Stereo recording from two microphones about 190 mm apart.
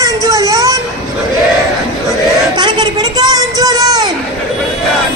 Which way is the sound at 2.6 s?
20° right (ahead or behind).